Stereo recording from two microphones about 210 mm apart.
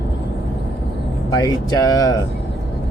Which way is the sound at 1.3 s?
15° left (ahead or behind).